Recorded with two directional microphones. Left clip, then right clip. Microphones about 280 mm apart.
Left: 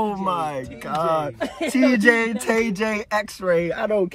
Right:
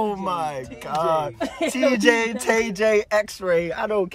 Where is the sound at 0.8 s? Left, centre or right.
Right.